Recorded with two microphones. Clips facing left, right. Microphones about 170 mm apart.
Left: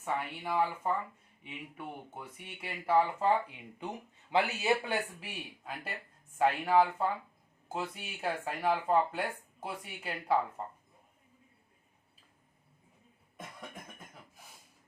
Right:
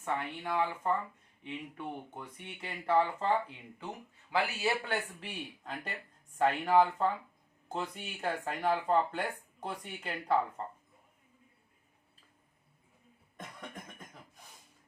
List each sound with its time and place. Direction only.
0.0 s speech: 10° left (ahead or behind)
4.3 s speech: 20° left (ahead or behind)
5.2 s speech: 5° left (ahead or behind)
13.3 s cough: 5° left (ahead or behind)